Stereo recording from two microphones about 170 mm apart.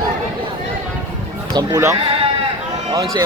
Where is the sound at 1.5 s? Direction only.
25° right (ahead or behind).